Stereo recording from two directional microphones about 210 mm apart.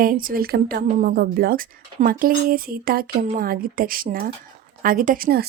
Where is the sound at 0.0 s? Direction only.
40° right (ahead or behind).